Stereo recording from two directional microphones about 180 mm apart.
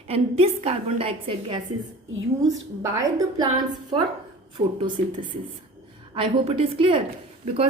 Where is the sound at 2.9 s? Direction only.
20° right (ahead or behind).